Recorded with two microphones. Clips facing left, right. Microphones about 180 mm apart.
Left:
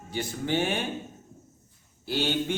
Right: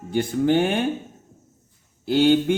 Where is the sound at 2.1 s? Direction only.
55° right (ahead or behind).